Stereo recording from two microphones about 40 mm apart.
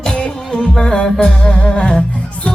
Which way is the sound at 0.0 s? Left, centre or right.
Centre.